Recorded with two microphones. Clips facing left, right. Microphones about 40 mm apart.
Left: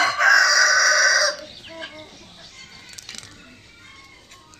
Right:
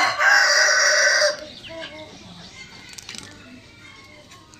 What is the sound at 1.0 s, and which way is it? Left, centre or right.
Chicken, centre.